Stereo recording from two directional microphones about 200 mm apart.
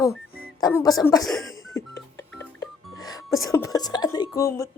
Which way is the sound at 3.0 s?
20° left (ahead or behind).